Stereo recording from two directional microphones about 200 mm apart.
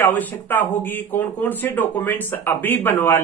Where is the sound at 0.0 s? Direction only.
10° left (ahead or behind).